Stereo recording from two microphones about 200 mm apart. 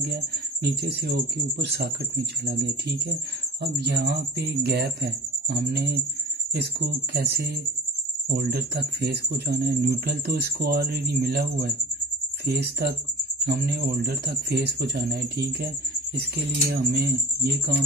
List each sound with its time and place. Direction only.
0.0 s speech: 55° right (ahead or behind)
13.5 s speech: 55° right (ahead or behind)